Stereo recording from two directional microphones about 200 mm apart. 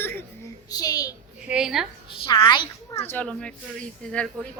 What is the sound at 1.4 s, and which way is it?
Speech, 5° right (ahead or behind).